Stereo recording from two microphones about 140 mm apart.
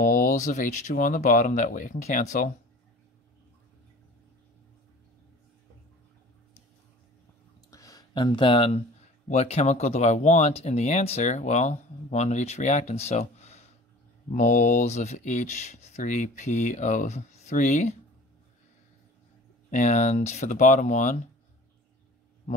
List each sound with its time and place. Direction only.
0.0 s speech: 75° left (ahead or behind)
7.7 s a sound: 25° left (ahead or behind); by 8.8 s 45° left (ahead or behind)
9.3 s speech: 50° left (ahead or behind)
14.3 s speech: 65° left (ahead or behind)
19.7 s speech: 55° left (ahead or behind)